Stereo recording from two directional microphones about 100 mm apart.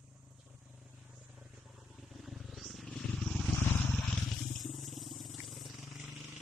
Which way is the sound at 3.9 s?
5° left (ahead or behind).